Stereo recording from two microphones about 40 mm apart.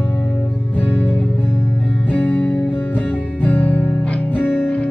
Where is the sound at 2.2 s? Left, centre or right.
Left.